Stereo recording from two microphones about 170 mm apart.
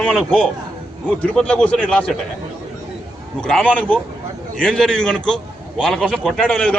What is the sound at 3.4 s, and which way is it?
A man's voice, 5° left (ahead or behind).